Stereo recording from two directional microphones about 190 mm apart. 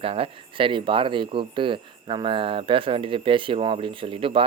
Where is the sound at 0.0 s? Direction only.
30° right (ahead or behind).